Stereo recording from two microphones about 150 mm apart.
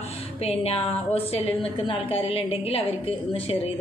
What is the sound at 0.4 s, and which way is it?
A woman's voice, 40° left (ahead or behind).